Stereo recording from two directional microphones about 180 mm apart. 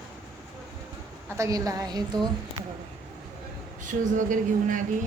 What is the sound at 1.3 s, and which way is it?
Speech, 15° right (ahead or behind).